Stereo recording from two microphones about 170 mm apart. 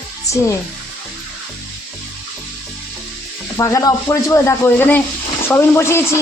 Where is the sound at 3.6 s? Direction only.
20° left (ahead or behind).